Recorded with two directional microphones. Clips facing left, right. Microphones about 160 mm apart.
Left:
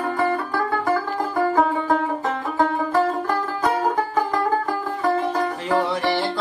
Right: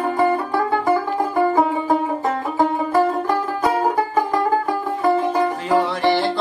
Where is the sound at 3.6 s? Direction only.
10° right (ahead or behind).